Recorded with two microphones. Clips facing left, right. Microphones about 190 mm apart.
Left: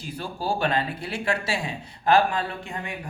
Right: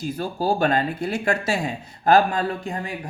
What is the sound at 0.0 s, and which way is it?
Speech, 45° right (ahead or behind).